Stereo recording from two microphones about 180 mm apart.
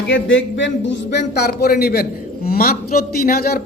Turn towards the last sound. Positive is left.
turn(degrees=55)  # may be behind; listen again after turning